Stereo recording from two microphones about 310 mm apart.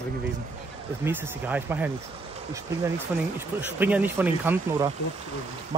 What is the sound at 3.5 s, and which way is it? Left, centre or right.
Speech, centre.